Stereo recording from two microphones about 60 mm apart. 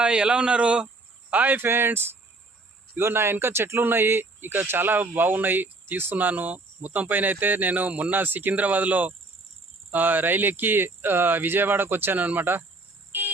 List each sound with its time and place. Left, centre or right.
0.0 s a man's voice: centre
1.3 s speech: right
13.1 s a sound: right